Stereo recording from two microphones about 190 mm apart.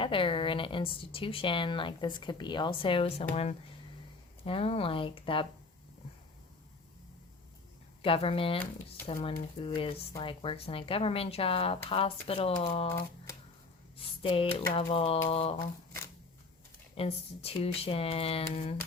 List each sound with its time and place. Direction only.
0.0 s speech: 25° left (ahead or behind)
4.4 s speech: 30° left (ahead or behind)
8.0 s speech: 30° left (ahead or behind)
14.2 s speech: 30° left (ahead or behind)
17.0 s speech: 30° left (ahead or behind)